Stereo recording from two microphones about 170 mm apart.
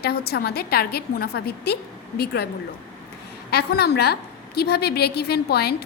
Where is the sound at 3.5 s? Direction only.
70° left (ahead or behind).